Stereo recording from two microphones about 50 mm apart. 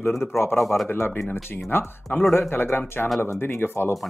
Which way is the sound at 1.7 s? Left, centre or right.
Left.